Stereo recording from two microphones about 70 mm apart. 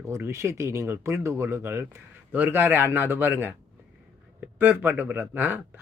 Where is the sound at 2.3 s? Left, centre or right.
Right.